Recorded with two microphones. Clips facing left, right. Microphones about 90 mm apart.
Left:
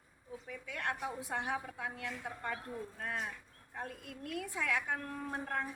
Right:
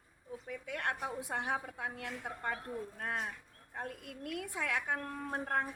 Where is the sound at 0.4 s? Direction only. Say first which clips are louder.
Right 2 dB; 45° right (ahead or behind).